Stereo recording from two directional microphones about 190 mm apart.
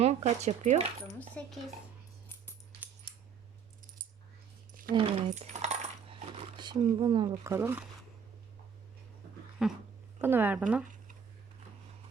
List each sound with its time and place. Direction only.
0.0 s speech: 35° right (ahead or behind)
1.4 s speech: 5° left (ahead or behind)
4.7 s a sound: 45° right (ahead or behind)
4.9 s coin: 30° right (ahead or behind); by 7.9 s 10° right (ahead or behind)
9.6 s speech: centre (ahead or behind)